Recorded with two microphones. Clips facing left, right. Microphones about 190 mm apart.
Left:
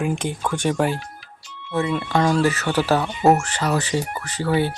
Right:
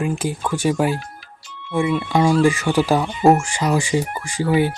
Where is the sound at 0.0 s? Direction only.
5° right (ahead or behind).